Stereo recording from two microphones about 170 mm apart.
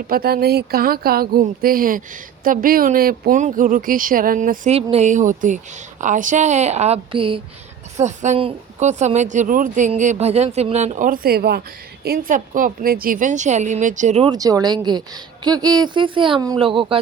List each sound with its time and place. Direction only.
0.1 s a woman's voice: 60° right (ahead or behind); by 7.4 s 30° right (ahead or behind)
7.9 s speech: 45° right (ahead or behind)
14.3 s a woman's voice: 20° right (ahead or behind)